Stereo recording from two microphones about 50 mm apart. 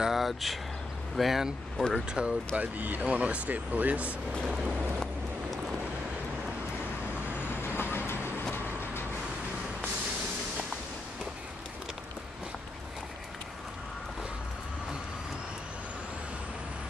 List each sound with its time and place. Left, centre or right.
0.0 s speech: centre
2.0 s speech: right
7.6 s vehicle: left